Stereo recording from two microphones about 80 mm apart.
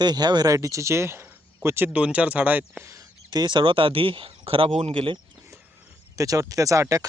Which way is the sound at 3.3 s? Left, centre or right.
Right.